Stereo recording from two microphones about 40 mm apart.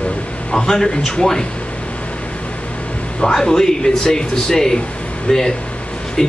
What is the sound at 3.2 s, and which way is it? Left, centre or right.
A man's voice, centre.